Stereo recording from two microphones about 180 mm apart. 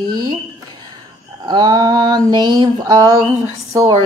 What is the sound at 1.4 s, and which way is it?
Speech, 20° right (ahead or behind).